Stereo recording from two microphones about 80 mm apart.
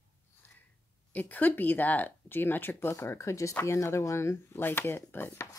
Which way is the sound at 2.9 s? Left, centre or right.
Left.